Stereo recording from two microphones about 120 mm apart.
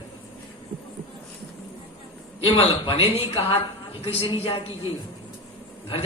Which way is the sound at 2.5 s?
45° left (ahead or behind).